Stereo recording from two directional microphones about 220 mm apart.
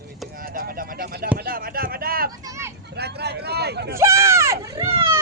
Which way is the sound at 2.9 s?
50° right (ahead or behind).